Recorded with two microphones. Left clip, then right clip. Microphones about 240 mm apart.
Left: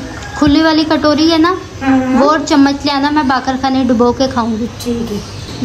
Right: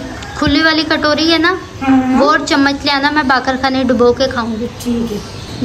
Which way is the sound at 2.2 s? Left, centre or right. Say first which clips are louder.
Left 2 dB; centre.